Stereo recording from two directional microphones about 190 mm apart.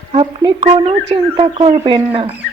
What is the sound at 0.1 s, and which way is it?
Speech, 30° right (ahead or behind).